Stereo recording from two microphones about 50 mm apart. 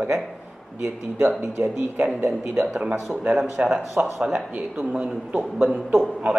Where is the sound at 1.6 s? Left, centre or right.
Right.